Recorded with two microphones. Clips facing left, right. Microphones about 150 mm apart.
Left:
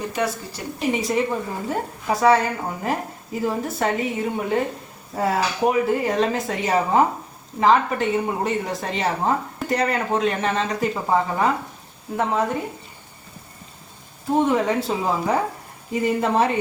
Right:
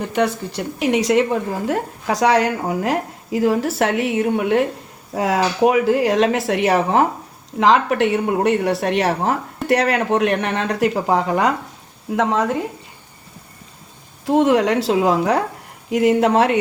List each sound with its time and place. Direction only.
0.1 s a woman's voice: 70° right (ahead or behind)
5.1 s speech: 90° right; by 7.0 s 70° right (ahead or behind)
7.6 s a woman's voice: 80° right
14.3 s speech: 90° right